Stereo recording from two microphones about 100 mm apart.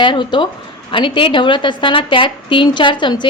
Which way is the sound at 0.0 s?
50° left (ahead or behind).